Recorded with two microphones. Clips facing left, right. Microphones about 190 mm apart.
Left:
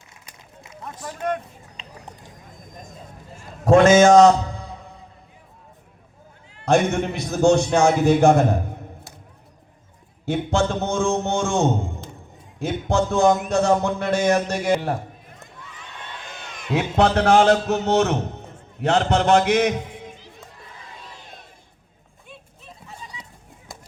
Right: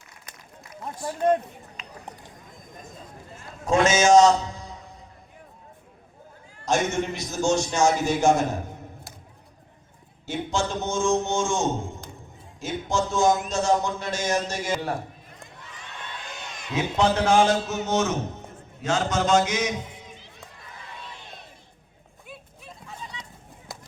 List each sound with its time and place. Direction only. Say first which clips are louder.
1.8 s a sound: left 3 dB; 30° left (ahead or behind)
3.7 s a man's voice: left 6 dB; 55° left (ahead or behind)
6.5 s a man's voice: left 6 dB; 65° left (ahead or behind)
10.2 s a man's voice: left 6 dB; 60° left (ahead or behind)
16.7 s a man's voice: left 4 dB; 65° left (ahead or behind)